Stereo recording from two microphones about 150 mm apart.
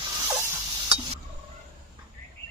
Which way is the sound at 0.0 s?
20° right (ahead or behind).